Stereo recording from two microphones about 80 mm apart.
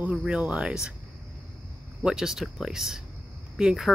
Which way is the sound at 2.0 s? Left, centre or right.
Centre.